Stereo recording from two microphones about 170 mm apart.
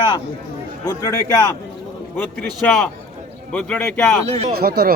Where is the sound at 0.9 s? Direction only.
20° left (ahead or behind).